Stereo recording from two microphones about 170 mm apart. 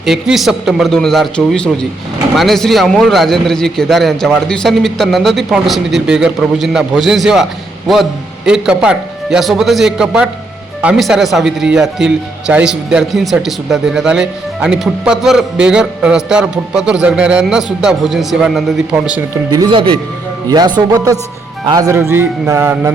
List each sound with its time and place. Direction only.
0.0 s a man's voice: centre (ahead or behind)
8.4 s a man's voice: 5° right (ahead or behind)
19.5 s a man's voice: 25° right (ahead or behind)